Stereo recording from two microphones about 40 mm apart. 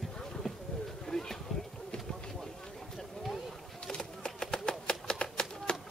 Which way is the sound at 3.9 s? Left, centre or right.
Left.